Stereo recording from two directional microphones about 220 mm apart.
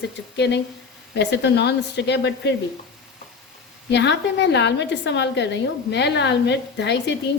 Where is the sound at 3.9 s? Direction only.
50° left (ahead or behind).